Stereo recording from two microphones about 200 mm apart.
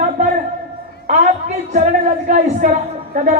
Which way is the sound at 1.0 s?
35° right (ahead or behind).